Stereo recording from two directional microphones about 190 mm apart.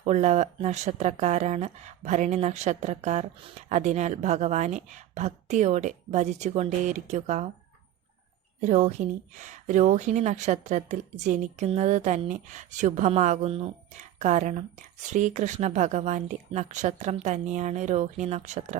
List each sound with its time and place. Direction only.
0.0 s speech: 35° right (ahead or behind)
8.6 s speech: 40° right (ahead or behind)